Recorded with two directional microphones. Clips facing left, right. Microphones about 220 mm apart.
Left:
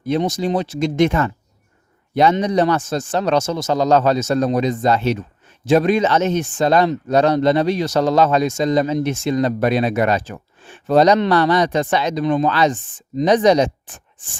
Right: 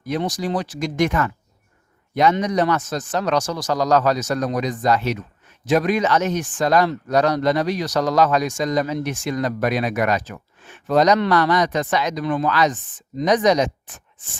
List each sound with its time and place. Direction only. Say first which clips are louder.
0.0 s speech: left 4 dB; 25° left (ahead or behind)